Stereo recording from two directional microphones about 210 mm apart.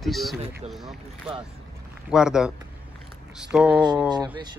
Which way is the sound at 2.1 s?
5° right (ahead or behind).